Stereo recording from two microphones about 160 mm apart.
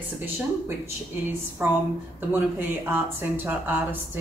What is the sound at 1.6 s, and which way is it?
Speech, 10° right (ahead or behind).